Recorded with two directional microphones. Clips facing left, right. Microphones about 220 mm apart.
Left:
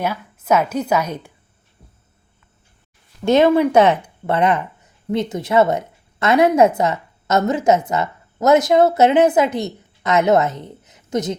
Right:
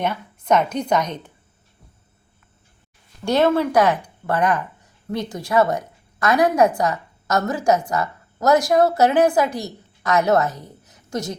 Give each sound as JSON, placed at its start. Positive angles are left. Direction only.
{"t": 0.0, "sound": "a woman's voice", "side_deg": 5}
{"t": 3.2, "sound": "speech", "side_deg": 15}